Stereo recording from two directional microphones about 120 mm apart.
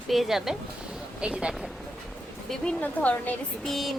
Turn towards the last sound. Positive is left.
turn(degrees=0)  # may be behind; listen again after turning